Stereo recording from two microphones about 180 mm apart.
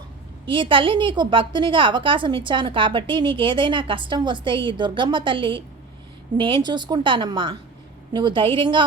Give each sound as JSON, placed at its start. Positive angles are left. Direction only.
{"t": 0.4, "sound": "a woman's voice", "side_deg": -25}